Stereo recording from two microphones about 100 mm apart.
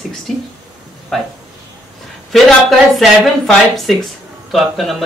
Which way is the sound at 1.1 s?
Centre (ahead or behind).